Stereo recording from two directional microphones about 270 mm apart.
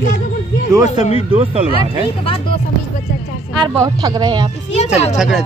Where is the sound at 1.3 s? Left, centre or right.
Centre.